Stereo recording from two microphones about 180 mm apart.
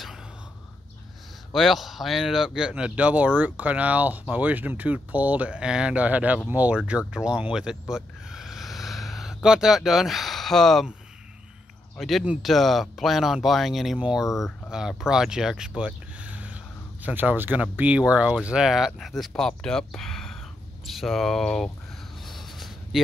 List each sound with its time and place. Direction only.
1.5 s speech: centre (ahead or behind)
7.9 s a sound: 5° right (ahead or behind)
12.0 s speech: centre (ahead or behind)
14.2 s speech: 15° left (ahead or behind)
14.7 s speech: 5° right (ahead or behind)
22.2 s a sound: centre (ahead or behind)